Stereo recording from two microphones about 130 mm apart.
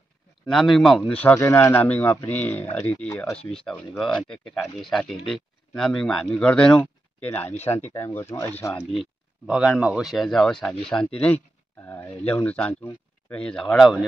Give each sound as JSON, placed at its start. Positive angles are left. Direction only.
{"t": 0.5, "sound": "speech", "side_deg": 0}
{"t": 1.3, "sound": "speech", "side_deg": 20}
{"t": 3.1, "sound": "speech", "side_deg": 20}
{"t": 3.6, "sound": "speech", "side_deg": 5}
{"t": 9.5, "sound": "speech", "side_deg": -5}